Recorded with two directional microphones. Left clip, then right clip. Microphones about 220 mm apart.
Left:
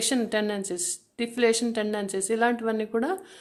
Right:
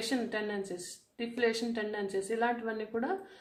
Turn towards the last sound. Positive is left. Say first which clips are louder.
# left 8 dB
turn(degrees=45)  # may be behind; listen again after turning